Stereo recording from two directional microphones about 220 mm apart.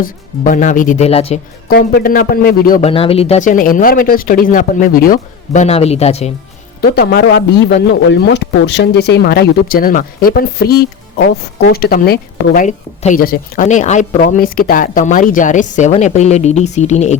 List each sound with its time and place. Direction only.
0.0 s a woman's voice: 35° left (ahead or behind)
1.7 s a woman's voice: 45° left (ahead or behind)
2.8 s a woman's voice: 25° left (ahead or behind)
5.6 s a man's voice: 30° left (ahead or behind)
6.8 s a woman's voice: 45° left (ahead or behind)